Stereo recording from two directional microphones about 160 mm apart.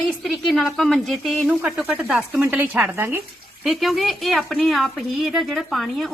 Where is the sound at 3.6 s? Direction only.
Centre (ahead or behind).